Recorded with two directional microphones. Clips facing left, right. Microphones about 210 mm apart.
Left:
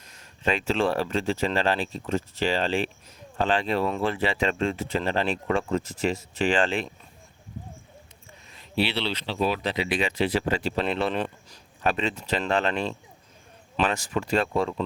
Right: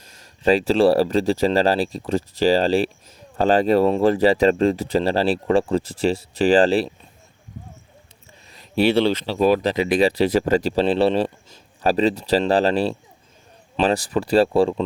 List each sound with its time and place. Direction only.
0.0 s speech: 35° right (ahead or behind)
8.5 s speech: 45° right (ahead or behind)